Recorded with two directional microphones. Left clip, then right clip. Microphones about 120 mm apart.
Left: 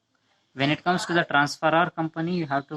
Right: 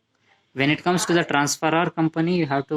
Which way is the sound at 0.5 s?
25° right (ahead or behind).